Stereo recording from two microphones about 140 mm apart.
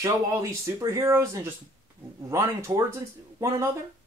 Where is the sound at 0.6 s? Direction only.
25° right (ahead or behind).